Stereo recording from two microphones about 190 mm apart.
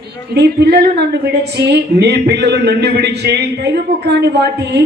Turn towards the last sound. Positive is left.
turn(degrees=-60)  # may be behind; listen again after turning